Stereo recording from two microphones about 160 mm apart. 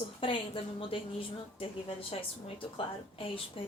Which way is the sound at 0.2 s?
35° left (ahead or behind).